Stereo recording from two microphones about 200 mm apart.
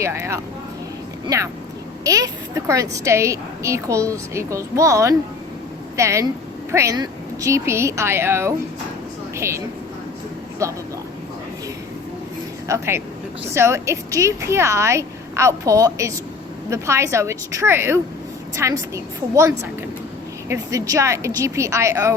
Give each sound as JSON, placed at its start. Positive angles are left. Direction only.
{"t": 0.0, "sound": "a woman's voice", "side_deg": -15}
{"t": 2.0, "sound": "a woman's voice", "side_deg": -15}
{"t": 12.6, "sound": "a woman's voice", "side_deg": -15}